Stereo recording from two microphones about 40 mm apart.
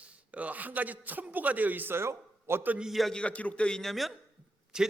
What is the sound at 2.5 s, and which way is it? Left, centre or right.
Speech, right.